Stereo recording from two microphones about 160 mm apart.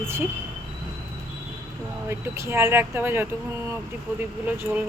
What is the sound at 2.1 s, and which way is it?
Speech, 15° right (ahead or behind).